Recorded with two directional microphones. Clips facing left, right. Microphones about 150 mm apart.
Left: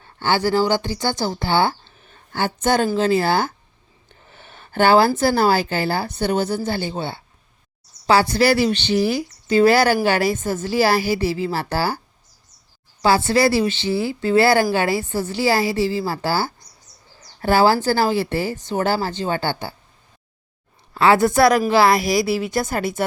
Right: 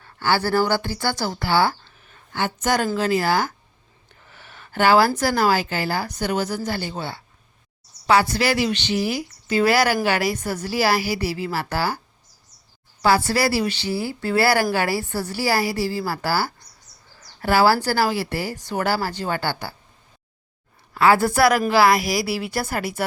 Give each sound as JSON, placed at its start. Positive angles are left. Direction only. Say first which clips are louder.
{"t": 0.0, "sound": "speech", "louder": "left 2 dB", "side_deg": 20}
{"t": 13.0, "sound": "speech", "louder": "left 3 dB", "side_deg": 25}
{"t": 20.9, "sound": "speech", "louder": "left 2 dB", "side_deg": 25}